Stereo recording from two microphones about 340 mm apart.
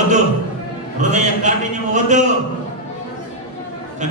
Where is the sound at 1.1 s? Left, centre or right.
Right.